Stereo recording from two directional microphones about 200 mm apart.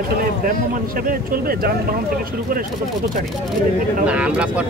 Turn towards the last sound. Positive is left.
turn(degrees=-5)  # may be behind; listen again after turning